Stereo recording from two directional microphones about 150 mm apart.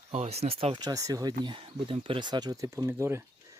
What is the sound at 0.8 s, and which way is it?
Speech, 25° right (ahead or behind).